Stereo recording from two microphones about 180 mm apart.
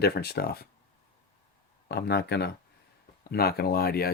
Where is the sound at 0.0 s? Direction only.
60° left (ahead or behind).